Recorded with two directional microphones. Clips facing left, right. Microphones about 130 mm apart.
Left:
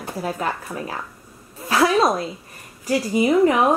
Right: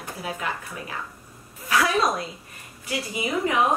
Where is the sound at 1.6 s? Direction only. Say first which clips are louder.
Left 5 dB; 30° left (ahead or behind).